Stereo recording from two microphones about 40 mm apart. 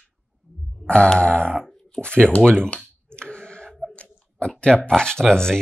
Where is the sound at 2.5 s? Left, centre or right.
Left.